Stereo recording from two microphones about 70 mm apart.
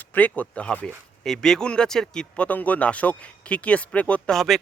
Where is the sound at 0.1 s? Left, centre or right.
Left.